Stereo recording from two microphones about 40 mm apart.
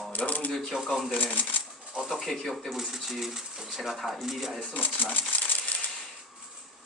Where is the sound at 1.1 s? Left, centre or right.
Left.